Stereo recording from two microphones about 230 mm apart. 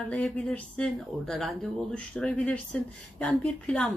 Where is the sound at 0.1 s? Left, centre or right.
Centre.